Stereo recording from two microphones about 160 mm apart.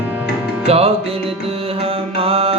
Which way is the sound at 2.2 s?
35° right (ahead or behind).